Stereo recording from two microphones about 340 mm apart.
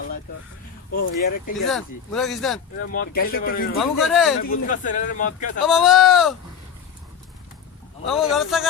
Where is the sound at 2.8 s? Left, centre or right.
Left.